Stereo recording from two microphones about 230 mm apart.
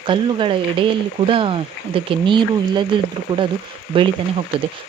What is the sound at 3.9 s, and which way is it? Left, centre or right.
Speech, right.